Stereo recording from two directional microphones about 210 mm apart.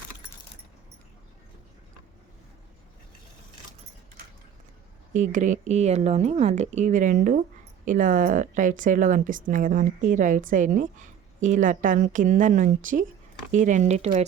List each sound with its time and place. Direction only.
5.1 s a woman's voice: 35° right (ahead or behind)